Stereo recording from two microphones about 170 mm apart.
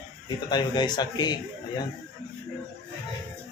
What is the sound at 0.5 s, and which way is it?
Speech, 25° left (ahead or behind).